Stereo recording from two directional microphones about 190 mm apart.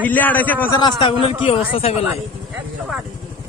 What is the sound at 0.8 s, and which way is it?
A man's voice, 25° left (ahead or behind).